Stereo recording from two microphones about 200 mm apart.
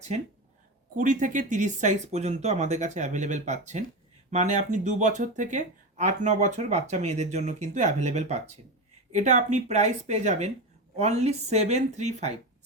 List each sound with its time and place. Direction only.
0.9 s speech: 40° right (ahead or behind)